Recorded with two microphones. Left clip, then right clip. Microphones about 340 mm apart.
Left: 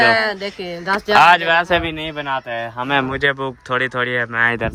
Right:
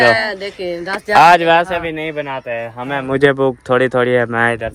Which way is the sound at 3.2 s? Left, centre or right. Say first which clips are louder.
Right 6 dB; centre.